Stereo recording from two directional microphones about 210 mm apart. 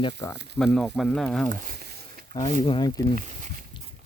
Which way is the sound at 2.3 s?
25° left (ahead or behind).